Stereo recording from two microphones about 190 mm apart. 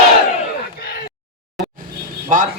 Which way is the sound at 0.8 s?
55° left (ahead or behind).